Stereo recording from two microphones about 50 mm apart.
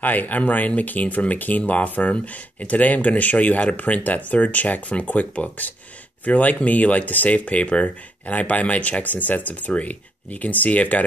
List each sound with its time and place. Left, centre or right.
0.0 s speech: left